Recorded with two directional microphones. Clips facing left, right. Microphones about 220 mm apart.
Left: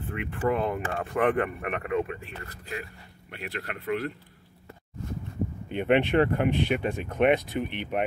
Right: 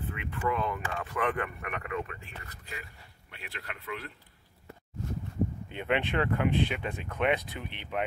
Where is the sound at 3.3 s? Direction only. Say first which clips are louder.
Left 8 dB; 50° left (ahead or behind).